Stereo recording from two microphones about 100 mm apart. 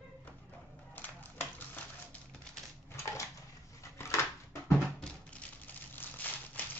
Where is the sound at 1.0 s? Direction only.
20° left (ahead or behind).